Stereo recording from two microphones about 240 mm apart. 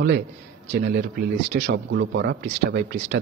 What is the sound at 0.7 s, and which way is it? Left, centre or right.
Speech, right.